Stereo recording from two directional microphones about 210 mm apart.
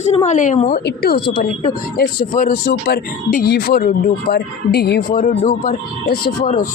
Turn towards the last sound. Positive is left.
turn(degrees=40)  # may be behind; listen again after turning